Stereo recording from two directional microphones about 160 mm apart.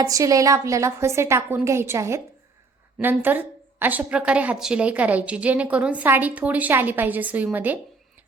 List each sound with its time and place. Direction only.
0.0 s a woman's voice: 20° right (ahead or behind)